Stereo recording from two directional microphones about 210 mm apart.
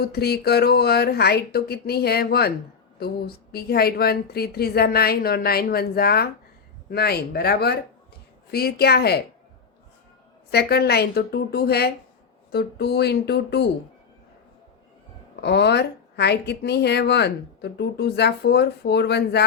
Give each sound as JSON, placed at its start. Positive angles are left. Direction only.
{"t": 0.0, "sound": "a woman's voice", "side_deg": 50}
{"t": 10.5, "sound": "a woman's voice", "side_deg": 50}
{"t": 15.4, "sound": "a woman's voice", "side_deg": 50}